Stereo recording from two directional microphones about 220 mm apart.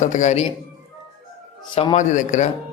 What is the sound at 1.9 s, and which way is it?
Speech, 35° left (ahead or behind).